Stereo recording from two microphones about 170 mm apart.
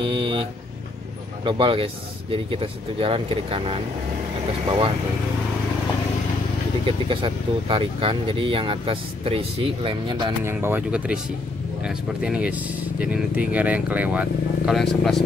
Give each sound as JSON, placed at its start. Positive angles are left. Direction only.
{"t": 0.0, "sound": "vehicle", "side_deg": -30}
{"t": 1.4, "sound": "speech", "side_deg": -30}
{"t": 7.1, "sound": "speech", "side_deg": -30}
{"t": 10.4, "sound": "speech", "side_deg": -15}
{"t": 14.8, "sound": "speech", "side_deg": 0}